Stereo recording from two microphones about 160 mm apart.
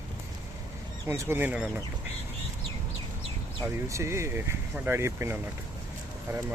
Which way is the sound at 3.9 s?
15° right (ahead or behind).